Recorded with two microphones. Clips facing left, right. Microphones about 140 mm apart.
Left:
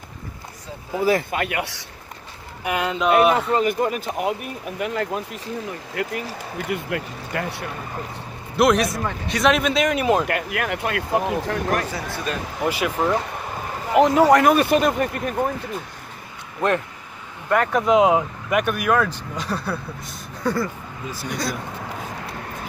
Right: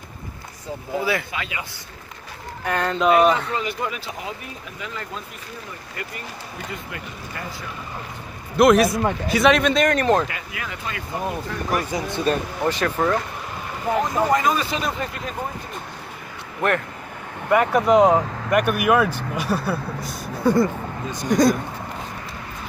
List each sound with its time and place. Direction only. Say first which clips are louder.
1.0 s speech: left 9 dB; 45° left (ahead or behind); by 1.8 s 70° left (ahead or behind)
2.6 s speech: right 1 dB; 10° left (ahead or behind)
3.5 s speech: left 6 dB; 45° left (ahead or behind); by 5.2 s 60° left (ahead or behind)
5.7 s speech: left 7 dB; 90° left
6.7 s speech: left 7 dB; 75° left (ahead or behind)
8.5 s speech: right 3 dB; centre (ahead or behind)
10.2 s speech: left 7 dB; 65° left (ahead or behind)
11.8 s speech: right 2 dB; 15° right (ahead or behind)
12.6 s speech: even; 10° left (ahead or behind)
13.9 s speech: left 7 dB; 85° left; by 15.3 s 55° left (ahead or behind)
17.5 s speech: right 2 dB; 5° right (ahead or behind)
21.3 s speech: right 11 dB; 45° right (ahead or behind)